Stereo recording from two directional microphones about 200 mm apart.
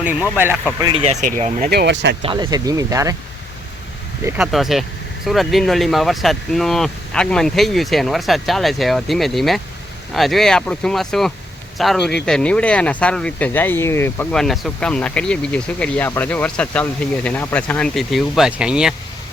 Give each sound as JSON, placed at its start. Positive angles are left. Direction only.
{"t": 0.8, "sound": "speech", "side_deg": -20}
{"t": 1.0, "sound": "speech", "side_deg": -35}
{"t": 1.7, "sound": "speech", "side_deg": -55}
{"t": 2.2, "sound": "speech", "side_deg": -25}
{"t": 4.2, "sound": "speech", "side_deg": -10}
{"t": 4.5, "sound": "speech", "side_deg": 0}